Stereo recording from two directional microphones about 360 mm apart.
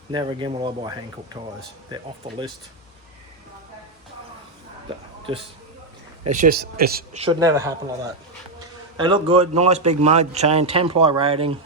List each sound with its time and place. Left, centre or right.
0.1 s a man's voice: centre
6.2 s a man's voice: right
9.0 s a man's voice: centre